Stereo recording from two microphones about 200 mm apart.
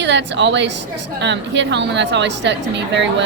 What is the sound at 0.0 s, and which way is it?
A woman's voice, 60° right (ahead or behind).